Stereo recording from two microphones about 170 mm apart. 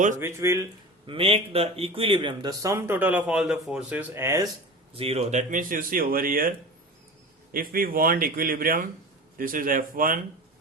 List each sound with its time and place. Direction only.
0.2 s speech: 15° right (ahead or behind)
1.0 s speech: 35° right (ahead or behind); by 4.4 s 15° right (ahead or behind)
4.9 s speech: 35° right (ahead or behind); by 6.5 s 55° right (ahead or behind)
7.5 s a man's voice: 60° right (ahead or behind)